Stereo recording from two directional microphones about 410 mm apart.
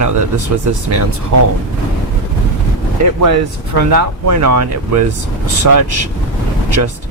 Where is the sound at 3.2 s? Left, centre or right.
Right.